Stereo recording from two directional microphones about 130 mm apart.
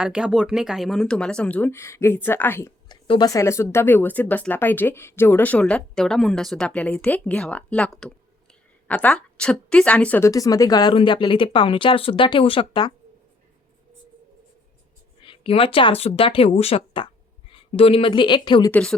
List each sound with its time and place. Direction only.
0.0 s speech: 5° right (ahead or behind); by 2.7 s 20° left (ahead or behind)
2.9 s speech: 30° left (ahead or behind)
15.2 s speech: 40° left (ahead or behind)
18.7 s speech: 5° left (ahead or behind)